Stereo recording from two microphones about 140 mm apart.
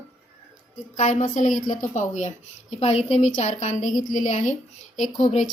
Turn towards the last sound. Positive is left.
turn(degrees=60)  # may be behind; listen again after turning